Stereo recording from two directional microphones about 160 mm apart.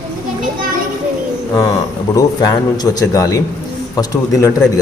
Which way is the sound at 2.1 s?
25° left (ahead or behind).